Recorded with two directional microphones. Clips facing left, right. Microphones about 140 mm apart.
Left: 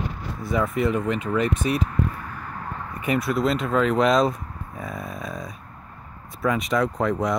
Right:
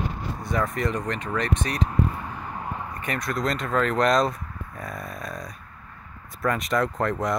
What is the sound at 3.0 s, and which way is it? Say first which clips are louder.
Speech: left 7 dB; 5° left (ahead or behind).